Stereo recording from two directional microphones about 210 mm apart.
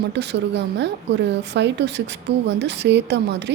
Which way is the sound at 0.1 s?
55° right (ahead or behind).